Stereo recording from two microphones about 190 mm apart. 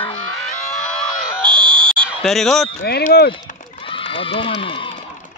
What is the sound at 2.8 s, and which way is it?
Speech, 55° left (ahead or behind).